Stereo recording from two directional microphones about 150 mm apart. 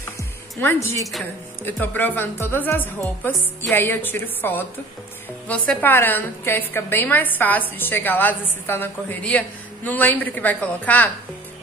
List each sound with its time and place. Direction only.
0.6 s a woman's voice: 15° left (ahead or behind)